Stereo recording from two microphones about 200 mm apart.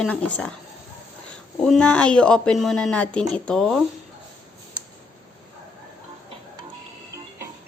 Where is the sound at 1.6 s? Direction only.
5° left (ahead or behind).